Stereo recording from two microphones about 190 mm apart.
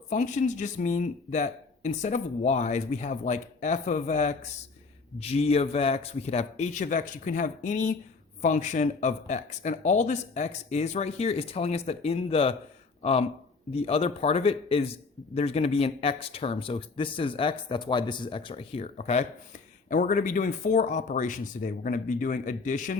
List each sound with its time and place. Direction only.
0.1 s speech: 40° left (ahead or behind)